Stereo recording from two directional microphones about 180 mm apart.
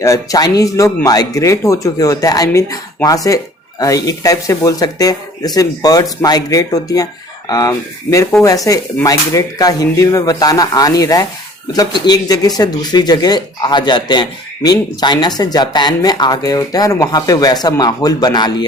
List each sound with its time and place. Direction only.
0.0 s speech: 20° left (ahead or behind)